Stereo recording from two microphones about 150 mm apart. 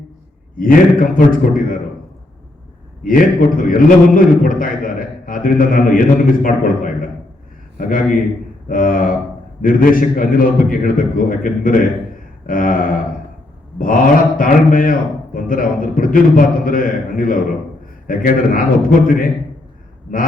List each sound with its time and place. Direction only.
0.5 s a man's voice: 70° left (ahead or behind)
3.0 s a man's voice: 65° left (ahead or behind)